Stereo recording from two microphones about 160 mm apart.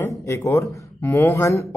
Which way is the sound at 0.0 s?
15° left (ahead or behind).